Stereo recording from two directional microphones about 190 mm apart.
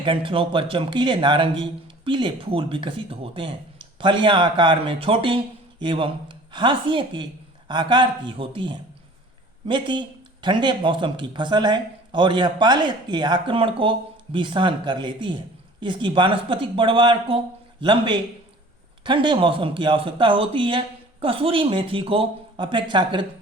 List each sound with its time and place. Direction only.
0.0 s a man's voice: 25° right (ahead or behind)